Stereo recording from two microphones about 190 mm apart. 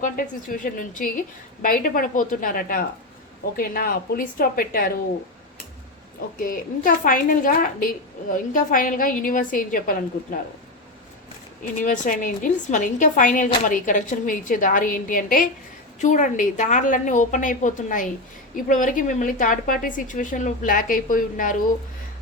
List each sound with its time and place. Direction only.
0.0 s a woman's voice: 45° left (ahead or behind)
6.4 s a woman's voice: 45° left (ahead or behind)
11.8 s a woman's voice: 40° left (ahead or behind)